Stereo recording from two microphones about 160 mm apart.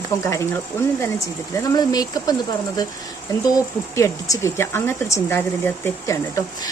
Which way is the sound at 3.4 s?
20° left (ahead or behind).